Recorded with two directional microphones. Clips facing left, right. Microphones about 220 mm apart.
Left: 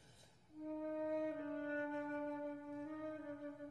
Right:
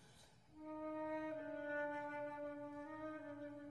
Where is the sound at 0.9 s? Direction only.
20° left (ahead or behind).